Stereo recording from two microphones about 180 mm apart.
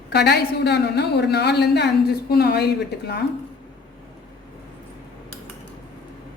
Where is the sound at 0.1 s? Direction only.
65° left (ahead or behind).